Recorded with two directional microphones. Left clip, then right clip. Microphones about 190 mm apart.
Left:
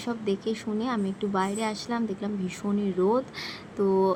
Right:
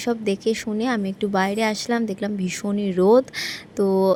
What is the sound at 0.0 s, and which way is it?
A woman's voice, 45° right (ahead or behind).